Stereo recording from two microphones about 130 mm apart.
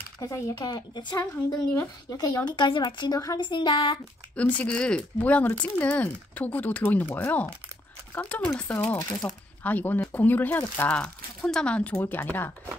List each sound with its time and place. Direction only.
0.2 s speech: 30° left (ahead or behind)
4.4 s speech: 10° left (ahead or behind)